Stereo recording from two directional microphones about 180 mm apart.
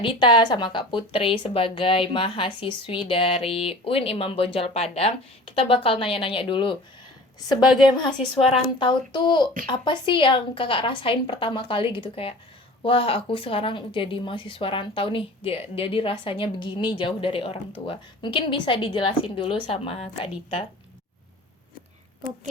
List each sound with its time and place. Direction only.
0.0 s a woman's voice: 25° left (ahead or behind)